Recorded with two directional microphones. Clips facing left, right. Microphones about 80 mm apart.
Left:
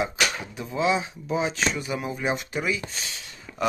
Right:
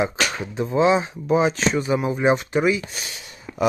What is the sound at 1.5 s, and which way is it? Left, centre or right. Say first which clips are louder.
Speech: right 6 dB; right.